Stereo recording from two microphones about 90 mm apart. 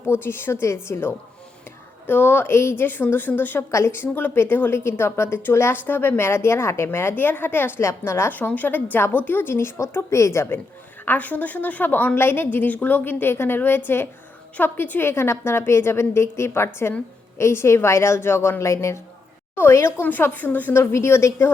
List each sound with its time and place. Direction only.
0.1 s a woman's voice: 25° left (ahead or behind)
11.0 s a woman's voice: 20° left (ahead or behind)